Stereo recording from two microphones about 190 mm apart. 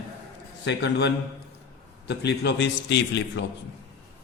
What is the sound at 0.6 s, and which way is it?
A man's voice, 65° left (ahead or behind).